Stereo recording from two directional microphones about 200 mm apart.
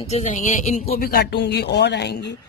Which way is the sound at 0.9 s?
50° left (ahead or behind).